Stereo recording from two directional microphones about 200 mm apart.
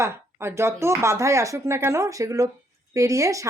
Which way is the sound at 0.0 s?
10° right (ahead or behind).